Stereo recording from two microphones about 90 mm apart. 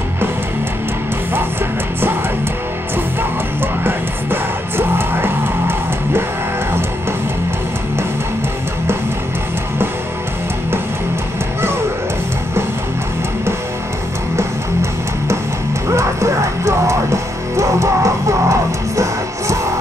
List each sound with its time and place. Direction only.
3.8 s music: 25° right (ahead or behind)
14.3 s music: 30° right (ahead or behind)